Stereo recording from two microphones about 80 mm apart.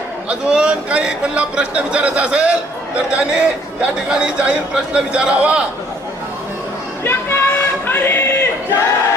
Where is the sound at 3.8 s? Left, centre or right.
Centre.